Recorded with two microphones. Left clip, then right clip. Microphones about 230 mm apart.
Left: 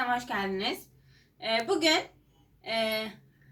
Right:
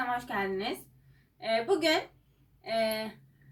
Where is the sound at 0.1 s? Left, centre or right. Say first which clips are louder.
Left 2 dB; centre.